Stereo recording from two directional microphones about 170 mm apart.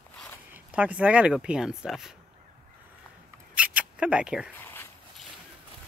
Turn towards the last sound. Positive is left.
turn(degrees=-5)  # may be behind; listen again after turning